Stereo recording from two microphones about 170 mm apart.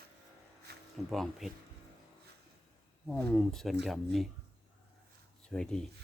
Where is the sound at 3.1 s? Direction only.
5° left (ahead or behind).